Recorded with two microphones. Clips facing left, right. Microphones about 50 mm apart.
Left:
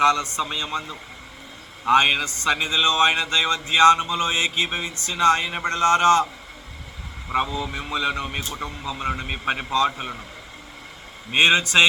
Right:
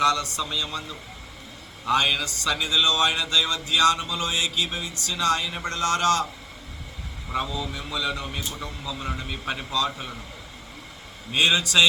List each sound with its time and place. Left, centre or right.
0.0 s speech: left
7.3 s speech: left
11.3 s speech: left